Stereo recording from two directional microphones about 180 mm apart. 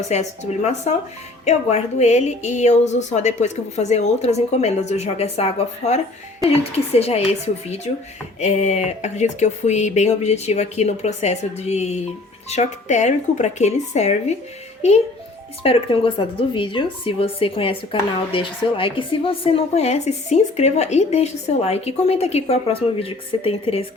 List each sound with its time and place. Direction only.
0.1 s a woman's voice: 40° left (ahead or behind)